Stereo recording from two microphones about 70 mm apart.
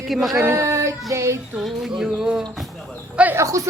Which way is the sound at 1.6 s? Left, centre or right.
Centre.